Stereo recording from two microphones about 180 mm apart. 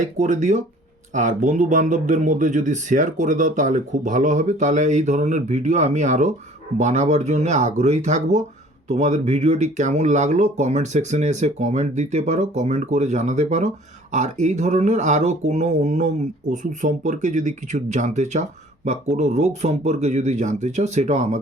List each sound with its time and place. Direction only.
0.0 s speech: 45° right (ahead or behind)